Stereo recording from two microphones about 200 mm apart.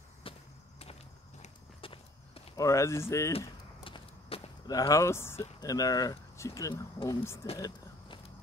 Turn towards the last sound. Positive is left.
turn(degrees=15)  # may be behind; listen again after turning